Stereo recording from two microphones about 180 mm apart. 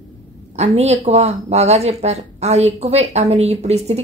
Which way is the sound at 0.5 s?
35° right (ahead or behind).